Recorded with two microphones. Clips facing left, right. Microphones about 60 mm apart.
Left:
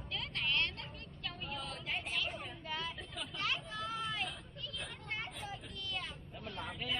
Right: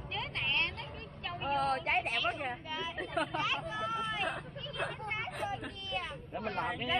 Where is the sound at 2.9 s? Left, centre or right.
Right.